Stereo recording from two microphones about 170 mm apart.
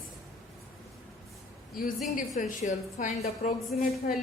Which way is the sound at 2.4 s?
50° left (ahead or behind).